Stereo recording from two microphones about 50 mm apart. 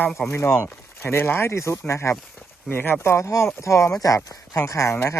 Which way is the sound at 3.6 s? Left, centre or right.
Left.